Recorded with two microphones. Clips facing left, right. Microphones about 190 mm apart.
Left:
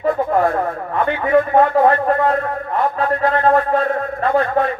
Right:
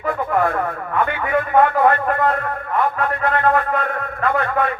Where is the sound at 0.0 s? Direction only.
30° left (ahead or behind).